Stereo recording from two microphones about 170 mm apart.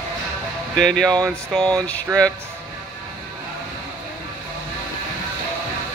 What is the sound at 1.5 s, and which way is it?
Speech, 5° left (ahead or behind).